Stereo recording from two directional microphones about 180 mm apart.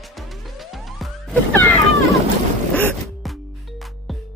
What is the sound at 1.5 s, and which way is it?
Cat, 10° left (ahead or behind).